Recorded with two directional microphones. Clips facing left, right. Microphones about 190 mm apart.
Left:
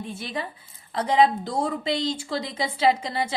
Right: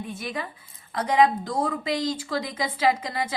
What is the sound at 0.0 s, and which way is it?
A woman's voice, 30° left (ahead or behind).